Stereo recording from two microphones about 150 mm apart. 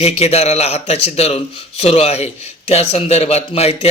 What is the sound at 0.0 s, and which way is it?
A man's voice, 45° left (ahead or behind).